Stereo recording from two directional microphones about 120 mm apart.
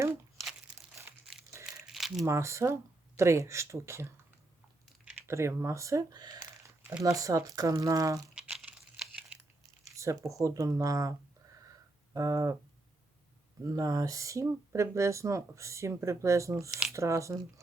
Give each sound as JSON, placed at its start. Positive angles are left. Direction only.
{"t": 1.6, "sound": "crumpling", "side_deg": 0}
{"t": 2.2, "sound": "speech", "side_deg": -25}
{"t": 5.2, "sound": "speech", "side_deg": -20}
{"t": 8.4, "sound": "crumpling", "side_deg": -5}
{"t": 9.9, "sound": "speech", "side_deg": -25}
{"t": 12.1, "sound": "speech", "side_deg": -30}
{"t": 13.7, "sound": "speech", "side_deg": -30}